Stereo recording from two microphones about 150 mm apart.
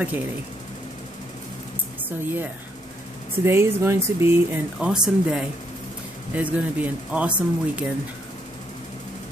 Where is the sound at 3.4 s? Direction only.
15° right (ahead or behind).